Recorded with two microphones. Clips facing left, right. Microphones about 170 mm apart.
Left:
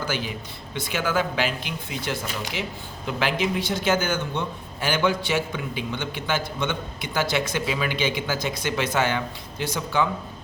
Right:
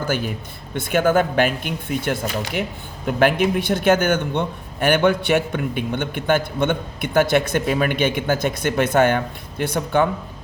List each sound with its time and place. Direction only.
0.1 s a man's voice: 50° right (ahead or behind)